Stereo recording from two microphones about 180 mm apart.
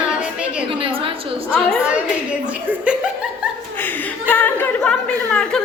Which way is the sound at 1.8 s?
5° right (ahead or behind).